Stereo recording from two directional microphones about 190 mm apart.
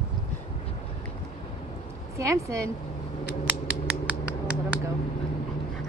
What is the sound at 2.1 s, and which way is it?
Speech, 15° right (ahead or behind).